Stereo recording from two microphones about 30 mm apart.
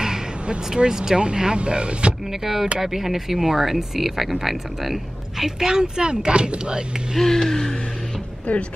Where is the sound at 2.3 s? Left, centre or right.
Centre.